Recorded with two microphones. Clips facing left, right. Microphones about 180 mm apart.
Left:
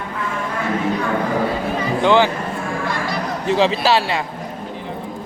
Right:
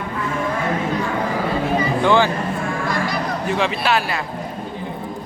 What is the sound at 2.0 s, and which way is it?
Speech, 20° left (ahead or behind).